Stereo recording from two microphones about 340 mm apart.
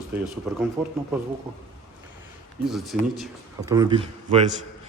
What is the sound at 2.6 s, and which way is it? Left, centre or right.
A man's voice, centre.